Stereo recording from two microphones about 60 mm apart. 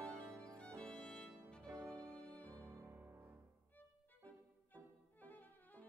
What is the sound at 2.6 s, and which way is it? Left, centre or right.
Music, right.